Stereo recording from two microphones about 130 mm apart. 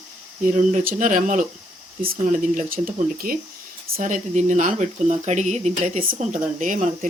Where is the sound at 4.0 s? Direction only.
70° right (ahead or behind).